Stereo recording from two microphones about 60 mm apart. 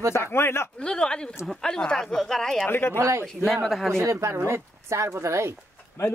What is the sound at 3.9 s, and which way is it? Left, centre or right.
Speech, right.